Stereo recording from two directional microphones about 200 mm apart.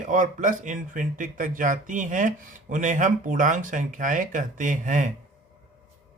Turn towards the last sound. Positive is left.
turn(degrees=-40)  # may be behind; listen again after turning